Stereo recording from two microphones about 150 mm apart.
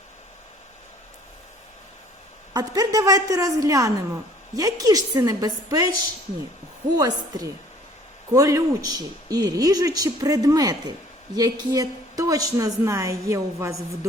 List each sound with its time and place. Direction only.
2.5 s speech: 25° right (ahead or behind)
6.9 s speech: 25° right (ahead or behind)